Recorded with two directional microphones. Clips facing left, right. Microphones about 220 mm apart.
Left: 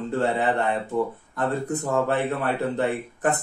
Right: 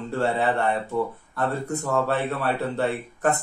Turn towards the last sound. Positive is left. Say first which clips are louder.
# even
turn(degrees=15)  # may be behind; listen again after turning